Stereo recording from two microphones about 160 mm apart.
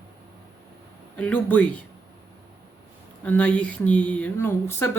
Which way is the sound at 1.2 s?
10° left (ahead or behind).